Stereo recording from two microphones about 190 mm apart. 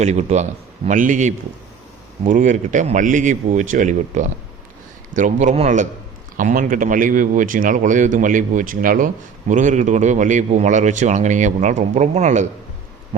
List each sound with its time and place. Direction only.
0.0 s a man's voice: 35° right (ahead or behind)